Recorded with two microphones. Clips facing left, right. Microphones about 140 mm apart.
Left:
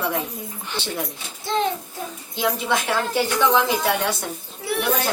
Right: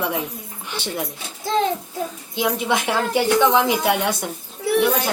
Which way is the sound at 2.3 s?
15° right (ahead or behind).